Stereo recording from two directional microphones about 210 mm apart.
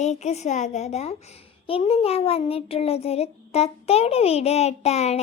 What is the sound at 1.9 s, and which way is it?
Child singing, 30° left (ahead or behind).